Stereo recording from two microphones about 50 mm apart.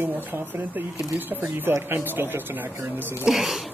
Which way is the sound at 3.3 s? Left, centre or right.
Centre.